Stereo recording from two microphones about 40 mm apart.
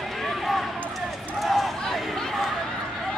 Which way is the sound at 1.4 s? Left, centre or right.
Centre.